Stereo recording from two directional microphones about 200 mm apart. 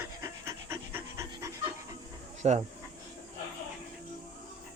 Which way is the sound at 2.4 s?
35° right (ahead or behind).